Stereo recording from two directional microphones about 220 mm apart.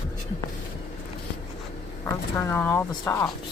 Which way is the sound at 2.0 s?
10° left (ahead or behind).